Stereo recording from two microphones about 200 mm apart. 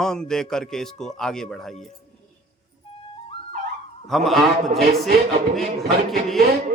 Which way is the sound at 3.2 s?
30° left (ahead or behind).